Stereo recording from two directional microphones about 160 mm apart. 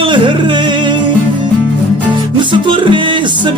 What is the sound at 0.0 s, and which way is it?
Music, 30° right (ahead or behind).